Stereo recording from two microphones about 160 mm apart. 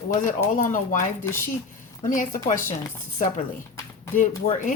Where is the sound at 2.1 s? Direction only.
55° left (ahead or behind).